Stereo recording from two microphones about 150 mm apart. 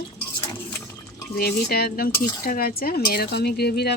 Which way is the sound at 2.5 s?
80° left.